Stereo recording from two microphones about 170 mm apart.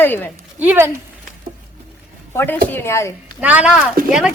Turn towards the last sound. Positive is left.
turn(degrees=-5)  # may be behind; listen again after turning